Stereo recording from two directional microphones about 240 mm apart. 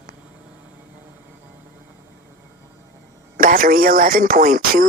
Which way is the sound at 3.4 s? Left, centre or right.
Right.